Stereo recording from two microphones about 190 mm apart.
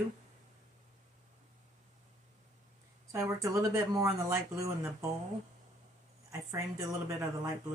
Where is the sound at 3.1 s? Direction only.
15° right (ahead or behind).